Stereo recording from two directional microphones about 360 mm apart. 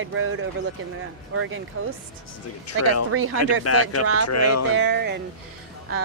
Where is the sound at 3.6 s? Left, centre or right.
Left.